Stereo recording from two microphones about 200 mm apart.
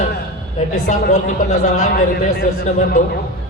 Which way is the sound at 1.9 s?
45° left (ahead or behind).